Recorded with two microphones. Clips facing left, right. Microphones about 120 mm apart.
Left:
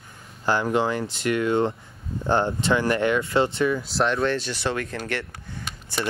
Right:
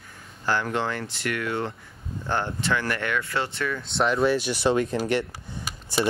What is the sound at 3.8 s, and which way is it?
Speech, centre (ahead or behind).